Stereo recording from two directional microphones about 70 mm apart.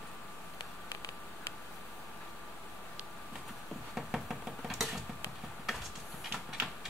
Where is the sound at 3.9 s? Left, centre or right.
Centre.